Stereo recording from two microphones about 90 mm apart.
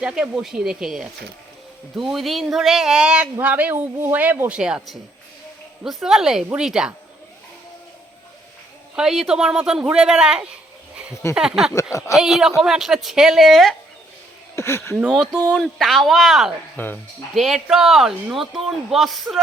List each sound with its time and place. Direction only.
0.0 s a woman's voice: 5° right (ahead or behind)
9.0 s speech: 5° right (ahead or behind)
11.7 s speech: 35° left (ahead or behind)
12.1 s speech: 5° right (ahead or behind)
14.5 s speech: 30° left (ahead or behind)
14.9 s speech: 5° right (ahead or behind)
16.7 s speech: 20° left (ahead or behind)
17.3 s speech: centre (ahead or behind)